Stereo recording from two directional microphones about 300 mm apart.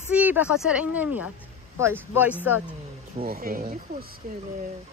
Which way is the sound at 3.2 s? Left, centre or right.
Right.